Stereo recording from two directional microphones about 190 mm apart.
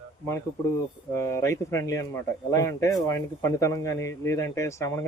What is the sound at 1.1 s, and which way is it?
A man's voice, 15° left (ahead or behind).